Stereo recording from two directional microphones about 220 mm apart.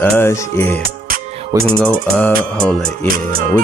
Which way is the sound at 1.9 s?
5° left (ahead or behind).